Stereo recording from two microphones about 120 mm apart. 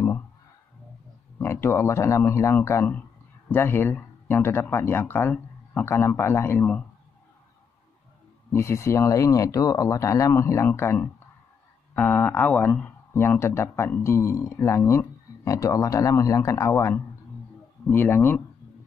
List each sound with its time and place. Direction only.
1.4 s speech: 20° left (ahead or behind)
8.5 s speech: 20° left (ahead or behind)